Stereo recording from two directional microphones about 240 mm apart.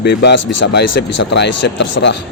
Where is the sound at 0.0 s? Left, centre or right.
Left.